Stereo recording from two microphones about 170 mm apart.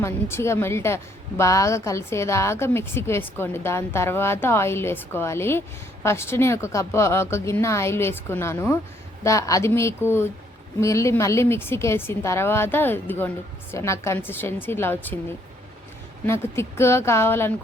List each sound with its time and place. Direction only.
0.0 s a woman's voice: 15° left (ahead or behind)
16.2 s a woman's voice: 15° left (ahead or behind)